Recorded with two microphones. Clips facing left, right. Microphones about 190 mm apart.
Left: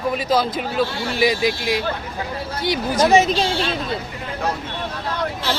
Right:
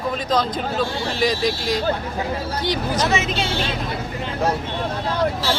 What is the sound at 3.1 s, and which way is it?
Speech, 40° left (ahead or behind).